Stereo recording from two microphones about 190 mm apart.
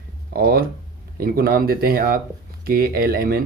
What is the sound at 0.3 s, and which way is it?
Speech, 55° right (ahead or behind).